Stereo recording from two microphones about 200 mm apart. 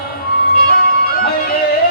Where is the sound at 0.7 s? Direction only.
50° left (ahead or behind).